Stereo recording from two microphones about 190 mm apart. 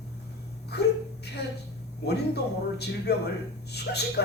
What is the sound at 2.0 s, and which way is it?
A man's voice, 60° left (ahead or behind).